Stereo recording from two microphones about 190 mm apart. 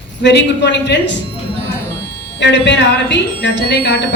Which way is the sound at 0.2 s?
65° left (ahead or behind).